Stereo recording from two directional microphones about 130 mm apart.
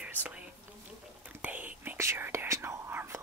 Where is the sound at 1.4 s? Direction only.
15° right (ahead or behind).